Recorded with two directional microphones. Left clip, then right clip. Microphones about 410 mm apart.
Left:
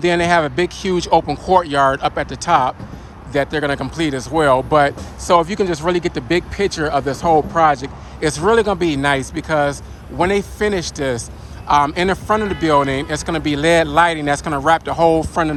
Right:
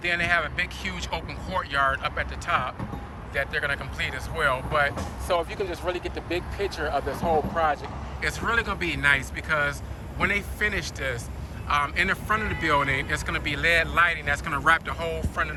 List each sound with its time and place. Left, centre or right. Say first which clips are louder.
0.0 s speech: left 9 dB; centre